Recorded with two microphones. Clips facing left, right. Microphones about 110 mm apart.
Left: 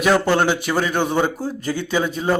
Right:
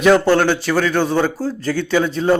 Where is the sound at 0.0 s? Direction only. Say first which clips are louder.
Right 4 dB; 10° left (ahead or behind).